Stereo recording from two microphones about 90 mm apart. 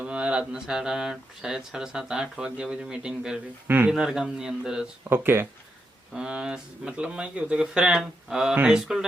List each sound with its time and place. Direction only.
0.0 s speech: 10° right (ahead or behind)
5.0 s speech: 25° right (ahead or behind)
6.1 s speech: 10° right (ahead or behind)